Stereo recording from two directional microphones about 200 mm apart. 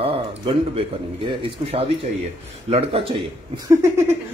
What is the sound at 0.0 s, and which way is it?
A man's voice, 30° right (ahead or behind).